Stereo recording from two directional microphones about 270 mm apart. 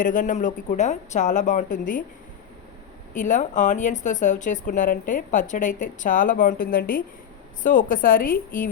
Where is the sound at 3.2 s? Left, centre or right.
Left.